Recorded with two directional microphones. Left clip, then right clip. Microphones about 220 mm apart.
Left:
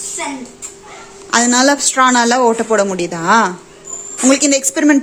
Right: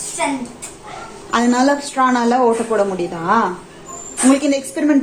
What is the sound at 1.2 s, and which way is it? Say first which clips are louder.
A woman's voice: left 3 dB; 40° left (ahead or behind).